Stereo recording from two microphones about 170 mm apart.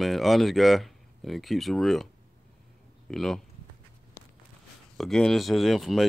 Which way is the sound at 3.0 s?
5° left (ahead or behind).